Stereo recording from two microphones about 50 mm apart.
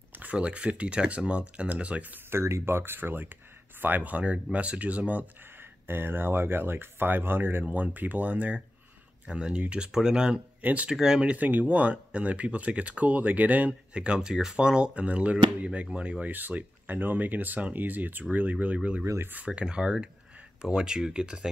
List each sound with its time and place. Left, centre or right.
0.1 s speech: right
2.2 s speech: right
5.6 s speech: right
9.3 s speech: centre
10.6 s speech: right
10.9 s speech: centre
11.3 s speech: right; by 21.5 s centre